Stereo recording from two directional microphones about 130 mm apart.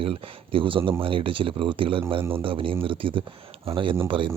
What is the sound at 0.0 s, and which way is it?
Speech, 45° right (ahead or behind).